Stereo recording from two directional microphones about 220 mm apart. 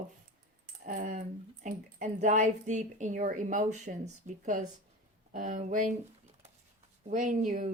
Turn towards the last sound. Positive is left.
turn(degrees=-35)  # may be behind; listen again after turning